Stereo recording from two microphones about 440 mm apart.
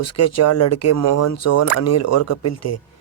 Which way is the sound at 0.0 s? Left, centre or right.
Left.